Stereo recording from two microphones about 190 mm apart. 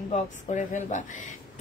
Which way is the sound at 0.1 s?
40° left (ahead or behind).